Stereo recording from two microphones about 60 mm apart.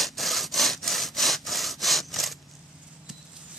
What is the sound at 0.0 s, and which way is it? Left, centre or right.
Sawing, centre.